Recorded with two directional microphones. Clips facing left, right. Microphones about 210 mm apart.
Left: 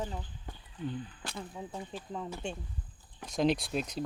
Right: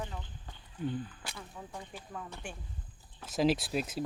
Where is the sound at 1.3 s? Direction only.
20° left (ahead or behind).